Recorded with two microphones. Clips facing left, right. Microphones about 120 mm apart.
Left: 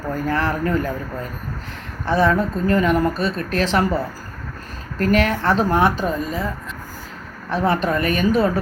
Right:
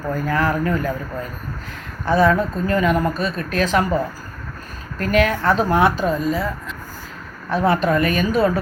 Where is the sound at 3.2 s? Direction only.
30° left (ahead or behind).